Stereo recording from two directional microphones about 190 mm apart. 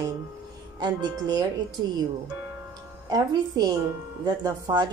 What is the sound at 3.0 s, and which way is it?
Speech, 20° right (ahead or behind).